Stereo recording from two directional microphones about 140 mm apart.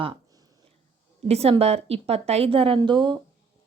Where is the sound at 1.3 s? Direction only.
45° right (ahead or behind).